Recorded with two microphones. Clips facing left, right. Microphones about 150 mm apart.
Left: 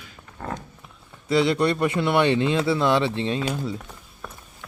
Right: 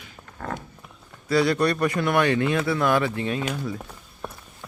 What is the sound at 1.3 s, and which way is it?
Speech, 20° left (ahead or behind).